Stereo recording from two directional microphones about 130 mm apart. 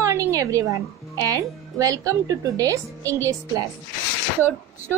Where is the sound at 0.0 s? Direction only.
25° right (ahead or behind).